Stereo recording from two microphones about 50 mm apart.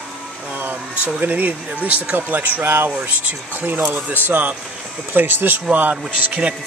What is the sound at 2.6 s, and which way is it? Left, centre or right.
Speech, right.